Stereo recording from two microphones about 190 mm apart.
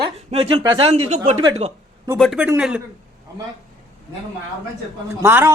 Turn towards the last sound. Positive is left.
turn(degrees=-10)  # may be behind; listen again after turning